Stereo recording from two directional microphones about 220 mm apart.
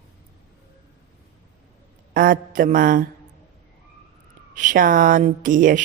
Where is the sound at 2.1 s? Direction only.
40° right (ahead or behind).